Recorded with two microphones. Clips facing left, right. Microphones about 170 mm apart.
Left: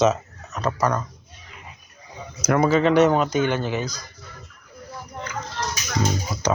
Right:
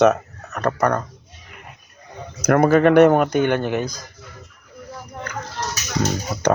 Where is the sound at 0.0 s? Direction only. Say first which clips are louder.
Right 4 dB; 60° right (ahead or behind).